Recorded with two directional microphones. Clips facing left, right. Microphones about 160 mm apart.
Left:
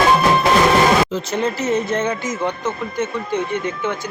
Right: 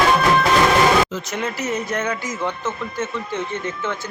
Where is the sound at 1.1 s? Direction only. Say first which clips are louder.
Left 5 dB; 30° left (ahead or behind).